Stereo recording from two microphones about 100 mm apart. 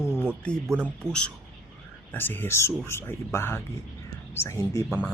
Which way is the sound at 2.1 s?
20° left (ahead or behind).